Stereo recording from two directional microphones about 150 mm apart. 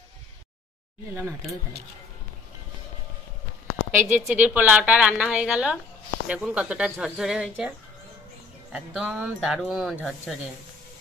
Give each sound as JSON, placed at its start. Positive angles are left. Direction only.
{"t": 1.1, "sound": "a woman's voice", "side_deg": -15}
{"t": 3.9, "sound": "a woman's voice", "side_deg": -15}
{"t": 8.7, "sound": "speech", "side_deg": -5}